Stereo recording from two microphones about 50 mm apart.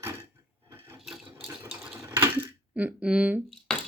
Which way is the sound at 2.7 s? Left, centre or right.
Right.